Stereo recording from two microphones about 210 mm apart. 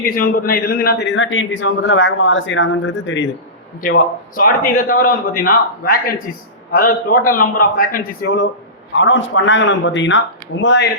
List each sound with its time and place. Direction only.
0.0 s a man's voice: 40° left (ahead or behind); by 3.2 s 60° left (ahead or behind)
4.4 s a man's voice: 40° left (ahead or behind)
9.0 s a man's voice: 60° left (ahead or behind)